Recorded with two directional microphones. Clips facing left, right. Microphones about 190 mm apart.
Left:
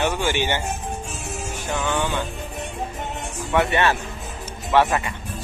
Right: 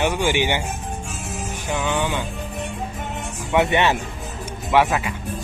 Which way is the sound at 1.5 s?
15° right (ahead or behind).